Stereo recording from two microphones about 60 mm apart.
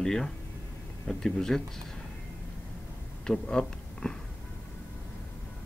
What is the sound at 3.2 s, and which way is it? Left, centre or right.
Speech, centre.